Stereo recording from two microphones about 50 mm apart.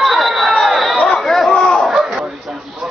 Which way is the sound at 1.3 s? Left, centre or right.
Centre.